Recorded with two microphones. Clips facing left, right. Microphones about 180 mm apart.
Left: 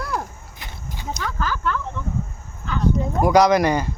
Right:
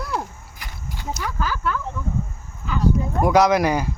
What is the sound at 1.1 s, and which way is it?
Speech, 10° right (ahead or behind).